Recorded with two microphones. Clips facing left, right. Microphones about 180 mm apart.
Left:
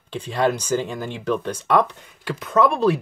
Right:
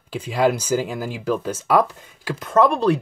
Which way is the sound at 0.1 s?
10° right (ahead or behind).